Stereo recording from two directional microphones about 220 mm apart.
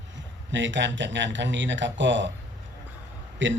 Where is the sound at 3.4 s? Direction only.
55° right (ahead or behind).